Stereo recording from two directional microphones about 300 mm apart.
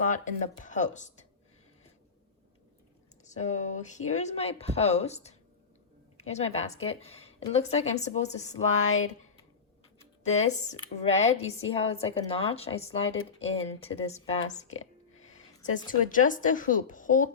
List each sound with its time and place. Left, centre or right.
0.0 s speech: left
3.2 s speech: left
8.5 s a sound: left
10.2 s speech: left
14.7 s a sound: left
16.0 s speech: left